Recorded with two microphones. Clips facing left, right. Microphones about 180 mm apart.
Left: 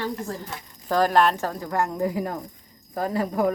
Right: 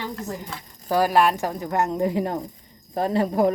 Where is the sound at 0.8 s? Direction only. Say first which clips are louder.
Right 1 dB; 10° right (ahead or behind).